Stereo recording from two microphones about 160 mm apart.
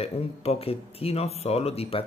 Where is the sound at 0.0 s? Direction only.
40° left (ahead or behind).